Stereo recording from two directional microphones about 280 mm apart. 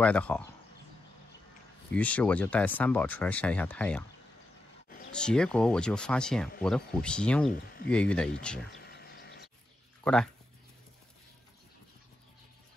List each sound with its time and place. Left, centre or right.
0.0 s speech: centre
1.9 s speech: centre
4.8 s a sound: left
5.1 s speech: centre
7.5 s speech: left
7.9 s speech: centre
8.8 s a sound: left
10.0 s speech: centre